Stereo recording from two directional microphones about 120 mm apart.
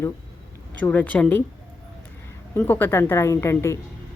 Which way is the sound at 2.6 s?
15° left (ahead or behind).